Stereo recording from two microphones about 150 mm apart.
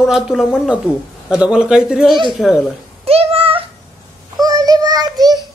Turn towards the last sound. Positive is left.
turn(degrees=-25)  # may be behind; listen again after turning